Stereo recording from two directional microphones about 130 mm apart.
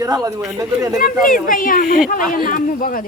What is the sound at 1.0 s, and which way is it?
Speech, 90° left.